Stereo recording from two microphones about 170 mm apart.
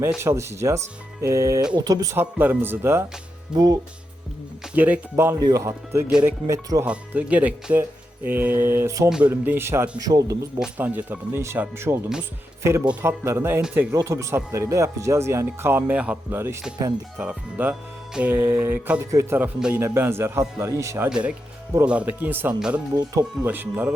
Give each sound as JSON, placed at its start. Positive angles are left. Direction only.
{"t": 0.1, "sound": "speech", "side_deg": -15}
{"t": 4.7, "sound": "speech", "side_deg": -10}
{"t": 6.1, "sound": "speech", "side_deg": -5}
{"t": 6.5, "sound": "speech", "side_deg": -20}
{"t": 6.8, "sound": "speech", "side_deg": -10}
{"t": 9.0, "sound": "speech", "side_deg": -5}
{"t": 10.6, "sound": "speech", "side_deg": -10}